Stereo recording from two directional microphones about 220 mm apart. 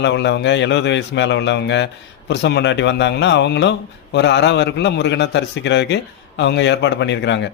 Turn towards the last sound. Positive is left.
turn(degrees=55)  # may be behind; listen again after turning